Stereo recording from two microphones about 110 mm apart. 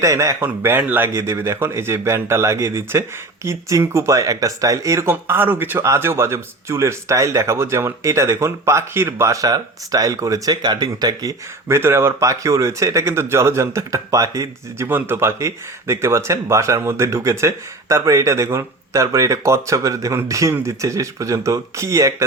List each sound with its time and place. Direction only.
0.0 s speech: 30° right (ahead or behind)
14.8 s speech: 20° right (ahead or behind)